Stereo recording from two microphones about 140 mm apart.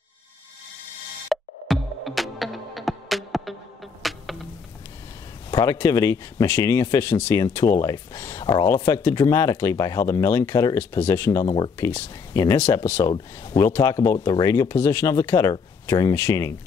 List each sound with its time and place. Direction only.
1.3 s music: centre (ahead or behind)
5.5 s a sound: 30° left (ahead or behind)
5.8 s speech: 20° left (ahead or behind)
11.4 s speech: 35° left (ahead or behind)
11.8 s speech: 20° left (ahead or behind)